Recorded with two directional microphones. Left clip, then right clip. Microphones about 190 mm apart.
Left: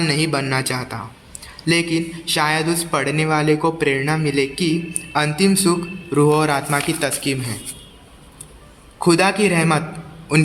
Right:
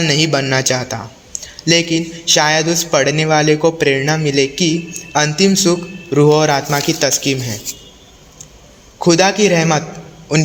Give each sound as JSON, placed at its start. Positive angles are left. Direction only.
{"t": 0.0, "sound": "a man's voice", "side_deg": -20}
{"t": 9.0, "sound": "a man's voice", "side_deg": -15}